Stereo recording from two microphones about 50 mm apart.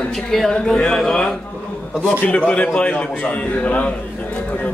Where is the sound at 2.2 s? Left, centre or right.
Left.